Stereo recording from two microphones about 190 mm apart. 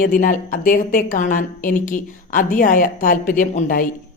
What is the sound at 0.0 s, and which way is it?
Speech, 45° left (ahead or behind).